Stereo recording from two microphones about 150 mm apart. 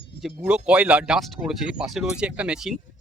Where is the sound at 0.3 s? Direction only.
10° right (ahead or behind).